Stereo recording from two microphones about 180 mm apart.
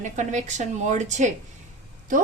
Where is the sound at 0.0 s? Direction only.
40° right (ahead or behind).